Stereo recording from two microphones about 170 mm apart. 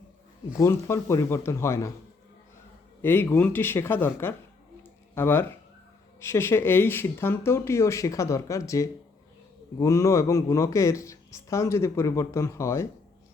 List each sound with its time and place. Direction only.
0.6 s a woman's voice: 15° left (ahead or behind)
3.0 s a woman's voice: 15° left (ahead or behind)
4.8 s a sound: 15° left (ahead or behind)
6.2 s a woman's voice: 15° left (ahead or behind)